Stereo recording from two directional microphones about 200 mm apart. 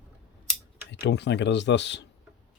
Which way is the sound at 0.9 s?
60° left (ahead or behind).